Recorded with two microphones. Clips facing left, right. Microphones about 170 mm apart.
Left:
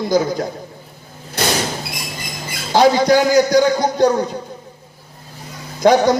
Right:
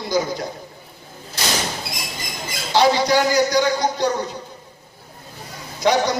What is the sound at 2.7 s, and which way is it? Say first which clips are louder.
A man's voice: left 4 dB; 50° left (ahead or behind).